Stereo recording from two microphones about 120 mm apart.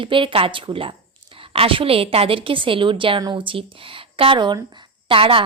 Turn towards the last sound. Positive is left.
turn(degrees=-50)  # may be behind; listen again after turning